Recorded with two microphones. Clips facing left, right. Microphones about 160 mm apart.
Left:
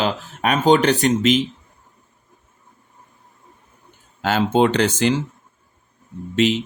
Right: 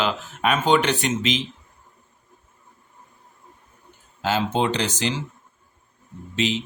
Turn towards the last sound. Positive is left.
turn(degrees=55)  # may be behind; listen again after turning